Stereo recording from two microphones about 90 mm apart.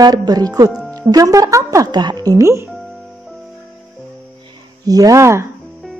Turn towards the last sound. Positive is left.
turn(degrees=-30)  # may be behind; listen again after turning